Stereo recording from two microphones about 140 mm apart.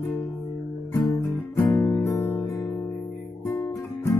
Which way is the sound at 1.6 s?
15° left (ahead or behind).